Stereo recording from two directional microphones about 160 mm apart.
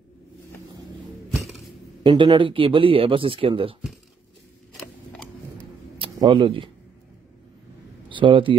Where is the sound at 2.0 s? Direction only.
30° right (ahead or behind).